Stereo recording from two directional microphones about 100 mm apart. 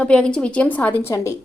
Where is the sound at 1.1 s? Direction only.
30° left (ahead or behind).